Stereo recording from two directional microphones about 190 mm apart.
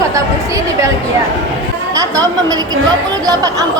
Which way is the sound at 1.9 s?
20° right (ahead or behind).